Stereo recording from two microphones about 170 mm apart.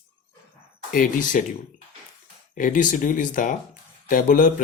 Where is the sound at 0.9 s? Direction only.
50° left (ahead or behind).